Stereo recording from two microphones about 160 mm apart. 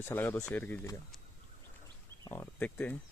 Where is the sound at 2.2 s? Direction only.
15° left (ahead or behind).